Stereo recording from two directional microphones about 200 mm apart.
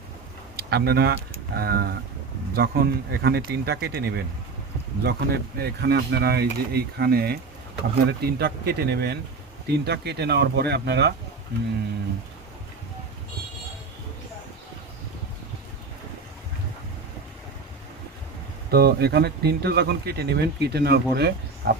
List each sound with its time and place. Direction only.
0.5 s speech: 50° right (ahead or behind)
18.7 s speech: 55° right (ahead or behind)